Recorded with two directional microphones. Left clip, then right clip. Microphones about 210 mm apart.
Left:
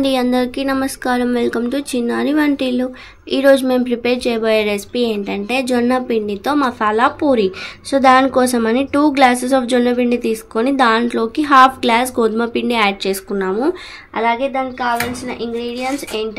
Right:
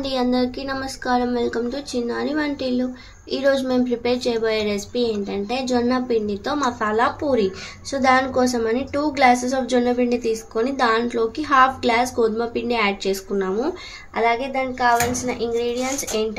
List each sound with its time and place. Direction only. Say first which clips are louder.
0.0 s speech: left 5 dB; 35° left (ahead or behind)